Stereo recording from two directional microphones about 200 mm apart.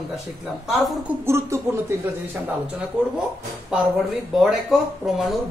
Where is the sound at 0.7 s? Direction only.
Centre (ahead or behind).